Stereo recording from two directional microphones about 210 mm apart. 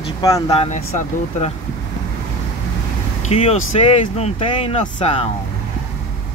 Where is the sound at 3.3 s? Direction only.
30° left (ahead or behind).